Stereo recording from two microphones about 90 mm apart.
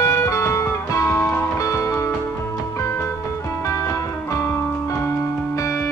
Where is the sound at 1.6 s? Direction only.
35° left (ahead or behind).